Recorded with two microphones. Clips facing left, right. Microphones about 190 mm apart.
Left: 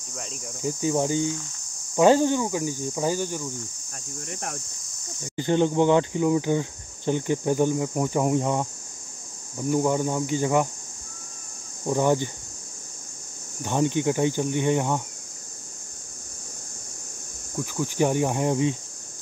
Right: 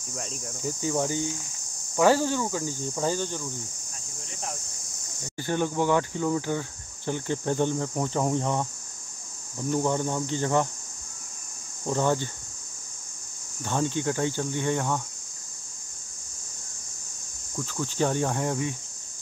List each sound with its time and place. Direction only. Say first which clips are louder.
0.1 s cricket: right 1 dB; centre (ahead or behind)
0.6 s cricket: left 4 dB; 20° left (ahead or behind)
4.3 s cricket: left 2 dB; 60° left (ahead or behind)
5.3 s cricket: left 6 dB; 20° left (ahead or behind)
9.7 s cricket: left 3 dB; 10° left (ahead or behind)
11.8 s cricket: left 3 dB; 15° left (ahead or behind)
13.6 s cricket: left 4 dB; 15° left (ahead or behind)
17.6 s cricket: left 3 dB; 15° left (ahead or behind)